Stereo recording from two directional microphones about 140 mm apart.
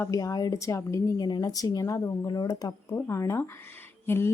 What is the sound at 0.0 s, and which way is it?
A woman's voice, 25° left (ahead or behind).